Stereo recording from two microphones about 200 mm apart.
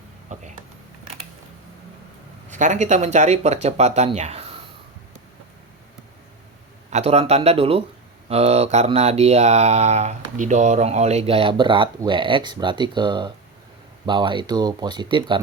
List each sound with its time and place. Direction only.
0.3 s a sound: 35° right (ahead or behind)
2.5 s speech: 40° right (ahead or behind)
6.9 s speech: 30° right (ahead or behind)